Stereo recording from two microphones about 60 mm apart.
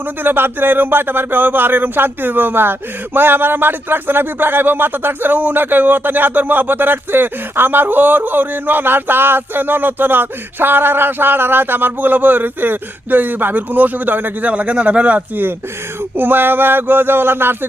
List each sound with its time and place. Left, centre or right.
0.2 s speech: right
16.1 s speech: right